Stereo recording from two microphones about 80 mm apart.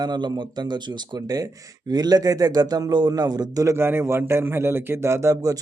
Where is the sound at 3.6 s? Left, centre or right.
Right.